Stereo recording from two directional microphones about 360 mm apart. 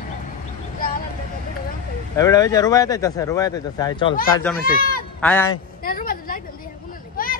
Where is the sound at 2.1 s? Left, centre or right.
Centre.